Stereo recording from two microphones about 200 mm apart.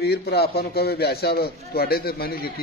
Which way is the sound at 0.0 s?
55° left (ahead or behind).